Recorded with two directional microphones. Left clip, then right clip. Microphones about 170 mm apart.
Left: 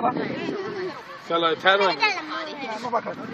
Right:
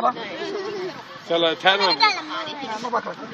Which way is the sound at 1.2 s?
40° right (ahead or behind).